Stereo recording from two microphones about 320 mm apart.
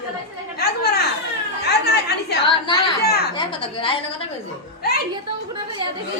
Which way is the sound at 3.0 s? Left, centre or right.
Left.